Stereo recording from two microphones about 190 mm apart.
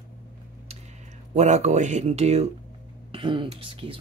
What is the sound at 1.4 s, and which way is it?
Speech, 35° right (ahead or behind).